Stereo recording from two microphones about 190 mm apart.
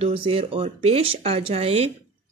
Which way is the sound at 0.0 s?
30° right (ahead or behind).